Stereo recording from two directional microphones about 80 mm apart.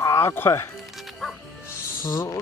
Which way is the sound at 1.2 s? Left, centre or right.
Centre.